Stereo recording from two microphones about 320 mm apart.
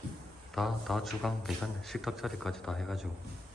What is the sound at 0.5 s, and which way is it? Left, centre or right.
A man's voice, centre.